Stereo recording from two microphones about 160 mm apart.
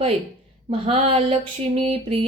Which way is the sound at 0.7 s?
35° right (ahead or behind).